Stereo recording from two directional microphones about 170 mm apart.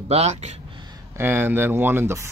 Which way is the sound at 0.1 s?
40° right (ahead or behind).